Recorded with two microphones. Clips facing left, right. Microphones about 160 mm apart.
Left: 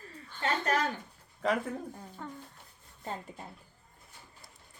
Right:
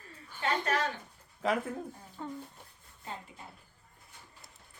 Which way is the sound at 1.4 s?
5° right (ahead or behind).